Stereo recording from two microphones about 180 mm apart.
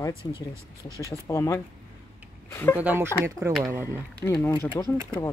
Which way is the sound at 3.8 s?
15° left (ahead or behind).